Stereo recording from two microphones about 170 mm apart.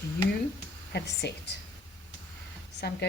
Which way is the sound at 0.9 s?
80° left.